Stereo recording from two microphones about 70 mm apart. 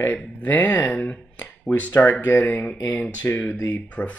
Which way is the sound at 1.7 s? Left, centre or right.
Left.